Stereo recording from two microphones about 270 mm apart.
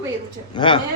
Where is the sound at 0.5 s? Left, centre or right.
Centre.